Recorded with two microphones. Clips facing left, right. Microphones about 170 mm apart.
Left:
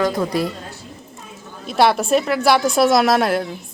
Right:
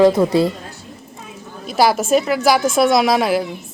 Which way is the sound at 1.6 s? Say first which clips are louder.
Even; centre (ahead or behind).